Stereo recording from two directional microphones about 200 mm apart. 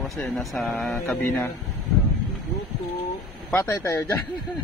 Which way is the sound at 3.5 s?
10° left (ahead or behind).